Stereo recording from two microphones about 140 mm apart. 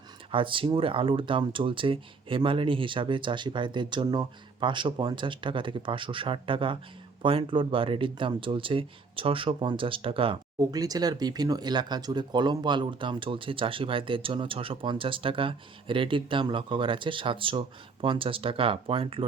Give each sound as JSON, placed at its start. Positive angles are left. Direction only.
{"t": 0.3, "sound": "speech", "side_deg": -40}
{"t": 10.6, "sound": "speech", "side_deg": -25}